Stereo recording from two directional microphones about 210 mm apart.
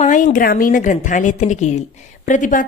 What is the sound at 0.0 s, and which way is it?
A woman's voice, 35° left (ahead or behind).